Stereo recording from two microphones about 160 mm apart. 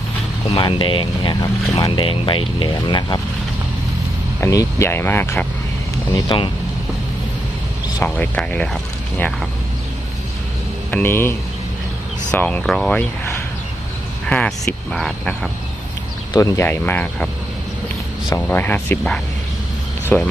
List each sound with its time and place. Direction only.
0.5 s speech: 35° left (ahead or behind)
4.4 s speech: 15° left (ahead or behind)
6.2 s speech: 30° left (ahead or behind)
8.0 s speech: 10° left (ahead or behind)
10.9 s speech: 15° left (ahead or behind)
14.3 s cricket: 5° left (ahead or behind)
16.3 s speech: 20° left (ahead or behind)
18.3 s speech: 10° left (ahead or behind)